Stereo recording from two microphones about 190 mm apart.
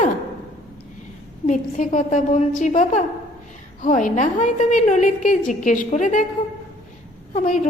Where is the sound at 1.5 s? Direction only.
40° left (ahead or behind).